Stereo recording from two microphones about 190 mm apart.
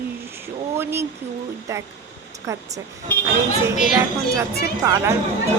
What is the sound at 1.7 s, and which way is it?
Speech, 15° right (ahead or behind).